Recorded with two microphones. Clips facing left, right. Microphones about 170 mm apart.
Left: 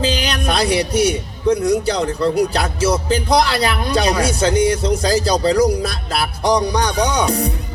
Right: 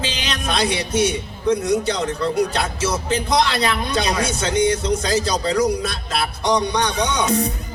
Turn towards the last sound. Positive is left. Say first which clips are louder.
# left 2 dB
turn(degrees=35)  # may be behind; listen again after turning